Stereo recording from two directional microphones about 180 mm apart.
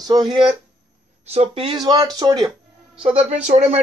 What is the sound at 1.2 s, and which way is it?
Speech, 35° right (ahead or behind).